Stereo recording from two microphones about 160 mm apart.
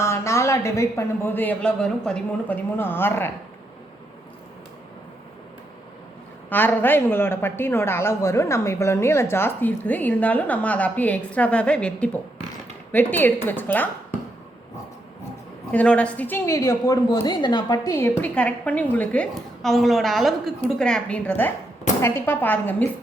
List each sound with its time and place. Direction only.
0.0 s a woman's voice: 15° left (ahead or behind)
6.5 s a woman's voice: 10° left (ahead or behind)
15.7 s a woman's voice: 5° left (ahead or behind); by 17.9 s 25° left (ahead or behind)
17.9 s a woman's voice: 15° left (ahead or behind)